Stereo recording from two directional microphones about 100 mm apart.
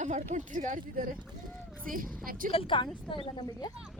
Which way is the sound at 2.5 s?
60° left (ahead or behind).